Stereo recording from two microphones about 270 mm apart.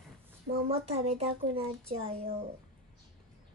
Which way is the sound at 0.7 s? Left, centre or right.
Right.